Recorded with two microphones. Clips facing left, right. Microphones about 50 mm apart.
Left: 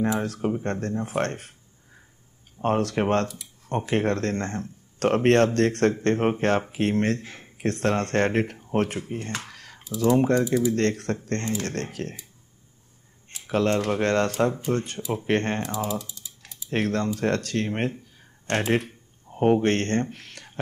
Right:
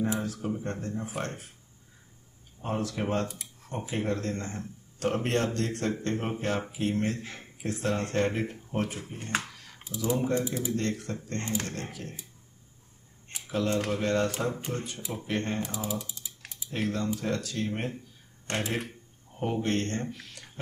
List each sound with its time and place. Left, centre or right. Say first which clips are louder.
0.0 s speech: left 5 dB; left
2.6 s speech: left 8 dB; left
9.5 s computer keyboard: left 5 dB; left
9.9 s speech: left 8 dB; left
13.5 s speech: left 6 dB; left
16.1 s typing: even; right
16.7 s speech: left 5 dB; left